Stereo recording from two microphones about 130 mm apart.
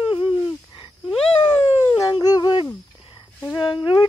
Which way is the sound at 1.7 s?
25° left (ahead or behind).